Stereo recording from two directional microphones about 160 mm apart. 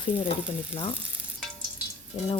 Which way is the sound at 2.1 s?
35° left (ahead or behind).